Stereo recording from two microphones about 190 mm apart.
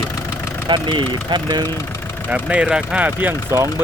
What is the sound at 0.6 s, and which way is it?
Speech, 25° right (ahead or behind).